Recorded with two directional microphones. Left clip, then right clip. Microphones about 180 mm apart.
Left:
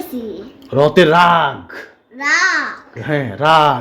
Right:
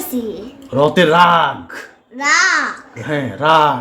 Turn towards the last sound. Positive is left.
turn(degrees=45)  # may be behind; listen again after turning